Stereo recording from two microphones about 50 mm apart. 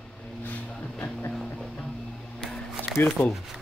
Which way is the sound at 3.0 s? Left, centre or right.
Left.